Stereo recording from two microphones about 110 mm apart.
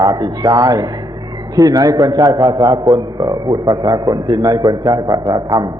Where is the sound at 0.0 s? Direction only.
35° right (ahead or behind).